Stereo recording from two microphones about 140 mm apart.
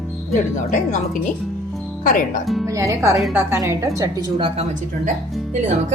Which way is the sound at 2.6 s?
20° right (ahead or behind).